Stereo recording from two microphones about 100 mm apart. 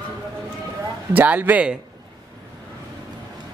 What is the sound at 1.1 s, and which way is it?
Speech, 15° right (ahead or behind).